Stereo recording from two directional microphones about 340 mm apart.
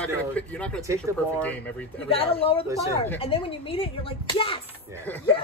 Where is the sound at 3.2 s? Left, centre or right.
Centre.